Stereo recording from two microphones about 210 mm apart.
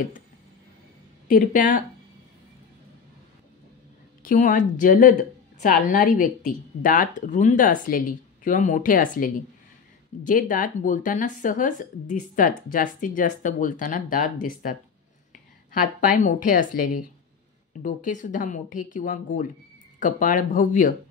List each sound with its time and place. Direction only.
1.3 s speech: 40° left (ahead or behind)
4.2 s speech: 40° left (ahead or behind)